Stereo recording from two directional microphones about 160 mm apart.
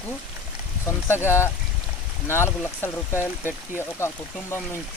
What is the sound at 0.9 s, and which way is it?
Speech, 15° left (ahead or behind).